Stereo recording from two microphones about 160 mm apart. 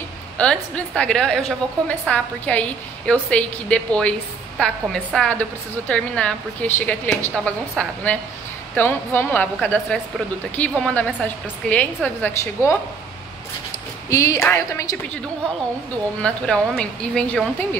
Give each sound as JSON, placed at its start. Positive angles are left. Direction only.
{"t": 0.4, "sound": "a woman's voice", "side_deg": 5}
{"t": 14.0, "sound": "a woman's voice", "side_deg": 20}
{"t": 16.2, "sound": "a woman's voice", "side_deg": 5}